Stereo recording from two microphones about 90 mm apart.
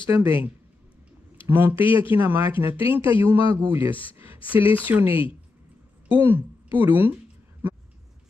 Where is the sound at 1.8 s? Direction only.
75° left (ahead or behind).